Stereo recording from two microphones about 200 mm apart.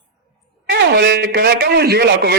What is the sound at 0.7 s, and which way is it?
Speech, 55° right (ahead or behind).